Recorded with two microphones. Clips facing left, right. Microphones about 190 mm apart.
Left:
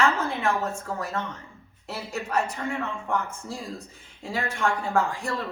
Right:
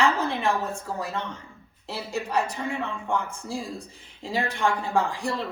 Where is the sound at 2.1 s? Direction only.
15° right (ahead or behind).